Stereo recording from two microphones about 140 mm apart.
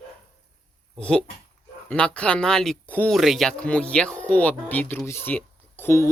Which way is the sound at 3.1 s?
Centre (ahead or behind).